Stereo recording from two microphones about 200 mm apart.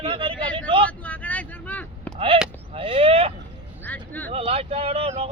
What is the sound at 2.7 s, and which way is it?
Speech, 25° right (ahead or behind).